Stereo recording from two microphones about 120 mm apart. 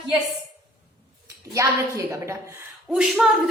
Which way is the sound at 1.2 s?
25° right (ahead or behind).